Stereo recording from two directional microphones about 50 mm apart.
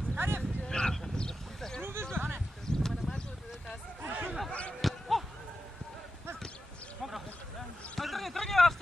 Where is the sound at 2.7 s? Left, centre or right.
Centre.